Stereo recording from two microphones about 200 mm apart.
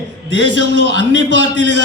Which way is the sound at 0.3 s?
65° right (ahead or behind).